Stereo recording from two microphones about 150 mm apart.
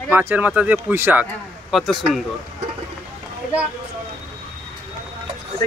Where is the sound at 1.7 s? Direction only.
Centre (ahead or behind).